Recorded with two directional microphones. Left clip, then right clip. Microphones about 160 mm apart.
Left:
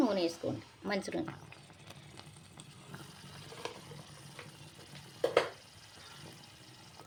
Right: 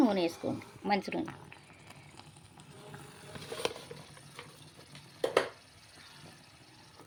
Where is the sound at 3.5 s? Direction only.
90° right.